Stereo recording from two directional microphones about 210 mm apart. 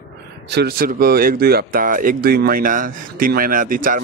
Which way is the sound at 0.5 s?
50° right (ahead or behind).